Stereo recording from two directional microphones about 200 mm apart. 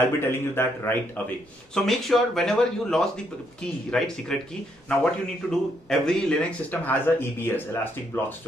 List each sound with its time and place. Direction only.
0.0 s speech: 10° left (ahead or behind)
5.5 s speech: centre (ahead or behind)